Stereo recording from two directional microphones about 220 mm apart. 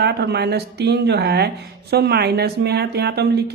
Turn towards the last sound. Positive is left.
turn(degrees=-50)  # may be behind; listen again after turning